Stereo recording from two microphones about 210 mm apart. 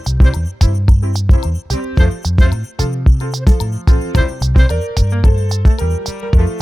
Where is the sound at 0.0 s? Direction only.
Centre (ahead or behind).